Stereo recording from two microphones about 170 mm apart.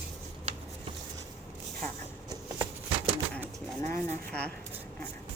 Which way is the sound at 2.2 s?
30° right (ahead or behind).